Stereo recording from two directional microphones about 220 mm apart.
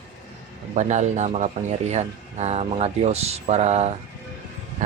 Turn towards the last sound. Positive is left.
turn(degrees=-30)  # may be behind; listen again after turning